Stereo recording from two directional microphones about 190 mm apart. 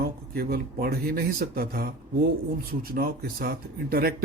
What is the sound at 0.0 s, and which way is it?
Speech, 55° right (ahead or behind).